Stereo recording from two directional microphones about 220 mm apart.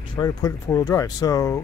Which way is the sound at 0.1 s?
20° left (ahead or behind).